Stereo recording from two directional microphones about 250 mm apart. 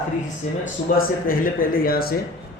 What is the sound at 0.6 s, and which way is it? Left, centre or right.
Speech, left.